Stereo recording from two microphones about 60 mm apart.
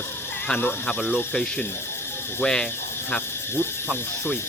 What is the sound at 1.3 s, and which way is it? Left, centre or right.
Speech, centre.